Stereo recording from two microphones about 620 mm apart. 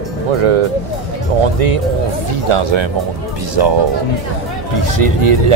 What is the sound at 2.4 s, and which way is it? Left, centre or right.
Speech, right.